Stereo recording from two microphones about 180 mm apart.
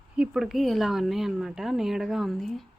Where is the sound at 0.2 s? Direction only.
Centre (ahead or behind).